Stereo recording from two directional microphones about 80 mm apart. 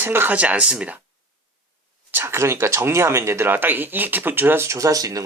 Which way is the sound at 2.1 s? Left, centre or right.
Right.